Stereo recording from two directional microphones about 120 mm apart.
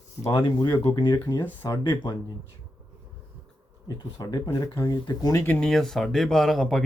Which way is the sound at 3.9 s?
35° left (ahead or behind).